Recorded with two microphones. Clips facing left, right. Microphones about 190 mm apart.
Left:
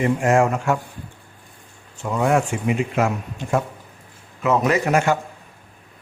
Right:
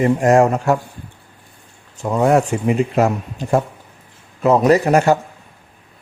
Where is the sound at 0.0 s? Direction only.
40° right (ahead or behind).